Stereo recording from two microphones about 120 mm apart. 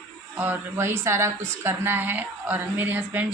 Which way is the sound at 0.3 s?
15° right (ahead or behind).